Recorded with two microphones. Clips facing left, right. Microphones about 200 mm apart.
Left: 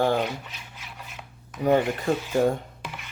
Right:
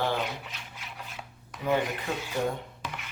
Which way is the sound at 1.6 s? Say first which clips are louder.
Left 6 dB; 45° left (ahead or behind).